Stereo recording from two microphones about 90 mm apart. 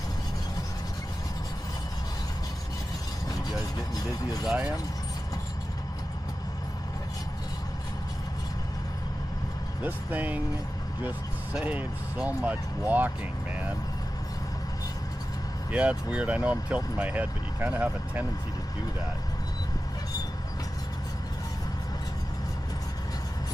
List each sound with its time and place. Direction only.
3.9 s speech: 50° left (ahead or behind)
4.5 s speech: 10° right (ahead or behind)
9.8 s speech: 20° right (ahead or behind)
11.6 s speech: 15° right (ahead or behind)
15.7 s speech: 15° right (ahead or behind)